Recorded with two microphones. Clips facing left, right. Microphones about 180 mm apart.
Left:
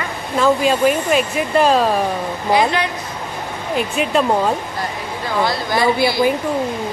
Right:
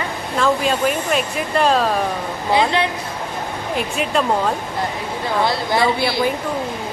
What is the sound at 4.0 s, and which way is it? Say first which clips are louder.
Speech: left 3 dB; centre (ahead or behind).